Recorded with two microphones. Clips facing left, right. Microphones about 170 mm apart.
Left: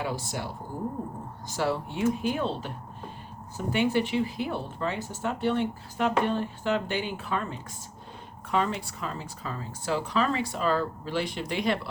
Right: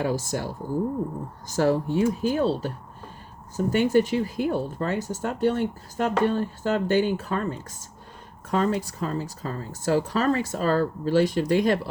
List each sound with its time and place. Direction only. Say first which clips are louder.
0.0 s speech: right 6 dB; 45° right (ahead or behind)